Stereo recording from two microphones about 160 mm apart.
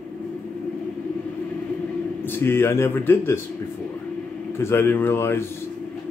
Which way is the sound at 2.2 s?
15° left (ahead or behind).